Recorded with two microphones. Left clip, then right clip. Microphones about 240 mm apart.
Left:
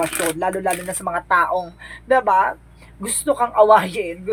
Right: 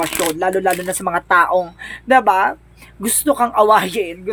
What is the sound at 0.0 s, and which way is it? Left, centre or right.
Speech, right.